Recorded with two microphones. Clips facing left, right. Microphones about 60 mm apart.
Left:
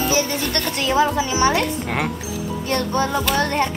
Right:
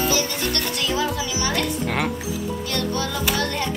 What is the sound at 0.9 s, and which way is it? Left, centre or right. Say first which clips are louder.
Music: left 9 dB; left.